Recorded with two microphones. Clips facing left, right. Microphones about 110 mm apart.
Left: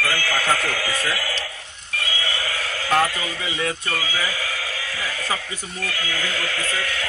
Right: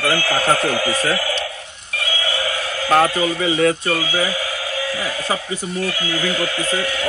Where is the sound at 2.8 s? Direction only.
35° right (ahead or behind).